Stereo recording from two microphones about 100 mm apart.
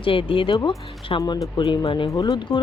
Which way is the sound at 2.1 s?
40° left (ahead or behind).